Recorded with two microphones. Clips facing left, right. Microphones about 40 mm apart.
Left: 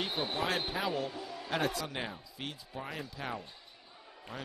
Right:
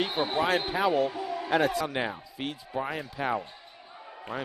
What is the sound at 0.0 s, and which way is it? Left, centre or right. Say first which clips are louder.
Speech: right 7 dB; right.